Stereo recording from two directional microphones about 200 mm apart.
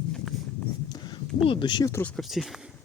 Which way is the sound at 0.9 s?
20° left (ahead or behind).